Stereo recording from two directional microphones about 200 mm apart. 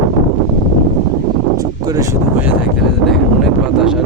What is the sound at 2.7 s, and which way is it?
Speech, centre (ahead or behind).